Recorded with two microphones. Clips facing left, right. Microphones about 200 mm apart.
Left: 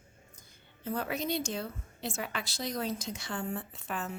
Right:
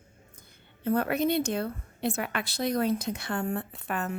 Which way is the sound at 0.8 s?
60° right (ahead or behind).